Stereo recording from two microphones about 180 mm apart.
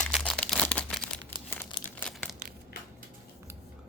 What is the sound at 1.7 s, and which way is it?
Crumpling, 30° left (ahead or behind).